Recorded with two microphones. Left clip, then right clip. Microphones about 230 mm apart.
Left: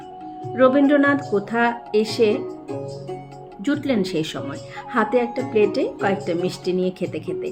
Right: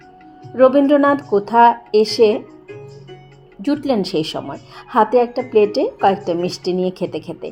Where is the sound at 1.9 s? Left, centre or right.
Centre.